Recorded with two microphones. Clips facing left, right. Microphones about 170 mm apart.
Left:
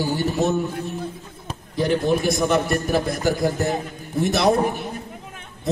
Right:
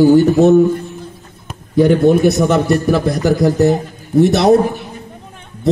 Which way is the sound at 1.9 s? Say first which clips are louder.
Right 6 dB; 50° right (ahead or behind).